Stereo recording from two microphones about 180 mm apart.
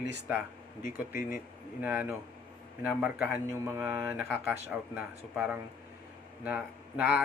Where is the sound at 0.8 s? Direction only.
50° left (ahead or behind).